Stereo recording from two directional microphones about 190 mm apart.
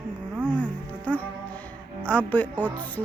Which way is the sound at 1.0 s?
10° left (ahead or behind).